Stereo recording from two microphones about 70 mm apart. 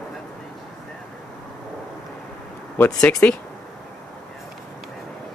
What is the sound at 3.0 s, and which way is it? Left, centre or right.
Speech, centre.